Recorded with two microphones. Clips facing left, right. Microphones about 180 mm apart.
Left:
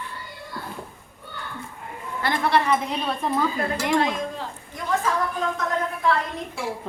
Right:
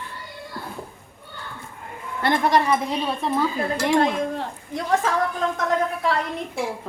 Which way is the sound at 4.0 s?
70° right (ahead or behind).